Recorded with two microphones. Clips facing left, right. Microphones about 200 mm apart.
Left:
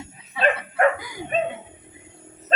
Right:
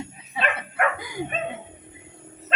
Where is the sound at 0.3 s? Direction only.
35° left (ahead or behind).